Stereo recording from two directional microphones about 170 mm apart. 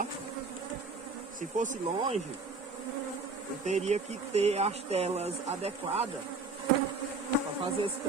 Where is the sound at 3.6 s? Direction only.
40° right (ahead or behind).